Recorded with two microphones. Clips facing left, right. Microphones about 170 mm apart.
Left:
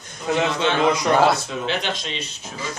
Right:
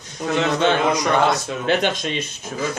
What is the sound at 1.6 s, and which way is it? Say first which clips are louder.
Speech: right 5 dB; 50° right (ahead or behind).